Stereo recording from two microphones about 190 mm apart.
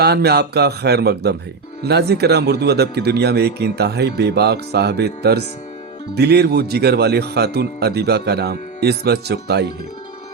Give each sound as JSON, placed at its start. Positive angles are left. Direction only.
{"t": 0.0, "sound": "speech", "side_deg": -60}